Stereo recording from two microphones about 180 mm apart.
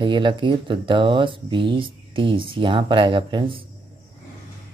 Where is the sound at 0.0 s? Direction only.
25° right (ahead or behind).